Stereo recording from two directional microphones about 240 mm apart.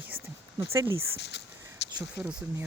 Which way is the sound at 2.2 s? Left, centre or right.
Centre.